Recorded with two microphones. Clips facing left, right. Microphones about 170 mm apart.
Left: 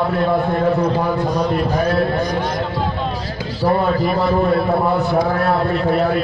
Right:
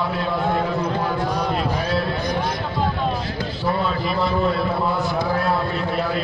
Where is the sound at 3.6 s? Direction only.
45° left (ahead or behind).